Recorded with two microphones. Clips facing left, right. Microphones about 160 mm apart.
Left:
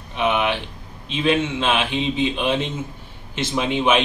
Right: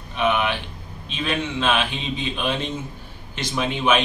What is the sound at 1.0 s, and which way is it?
A man's voice, 20° left (ahead or behind).